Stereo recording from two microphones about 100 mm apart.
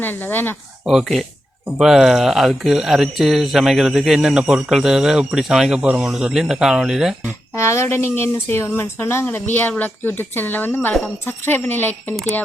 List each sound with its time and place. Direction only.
0.0 s speech: 20° left (ahead or behind)
0.9 s speech: centre (ahead or behind)
7.5 s speech: 30° left (ahead or behind)